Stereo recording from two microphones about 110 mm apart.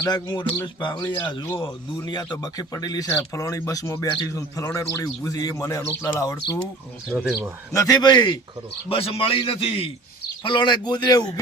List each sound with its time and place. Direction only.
0.1 s speech: 40° left (ahead or behind)
7.1 s speech: 15° right (ahead or behind)
7.7 s a man's voice: 30° left (ahead or behind)
8.0 s speech: 40° left (ahead or behind)
8.9 s a man's voice: 55° left (ahead or behind)
10.4 s speech: 45° left (ahead or behind)